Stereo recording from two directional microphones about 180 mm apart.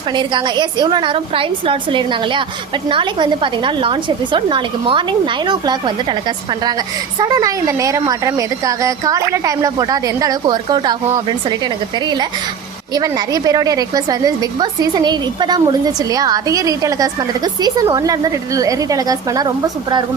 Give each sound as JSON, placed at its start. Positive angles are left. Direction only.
{"t": 0.1, "sound": "a woman's voice", "side_deg": -25}